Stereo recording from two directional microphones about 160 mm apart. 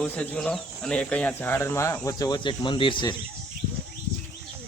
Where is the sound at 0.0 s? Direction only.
5° left (ahead or behind); by 3.2 s 30° left (ahead or behind).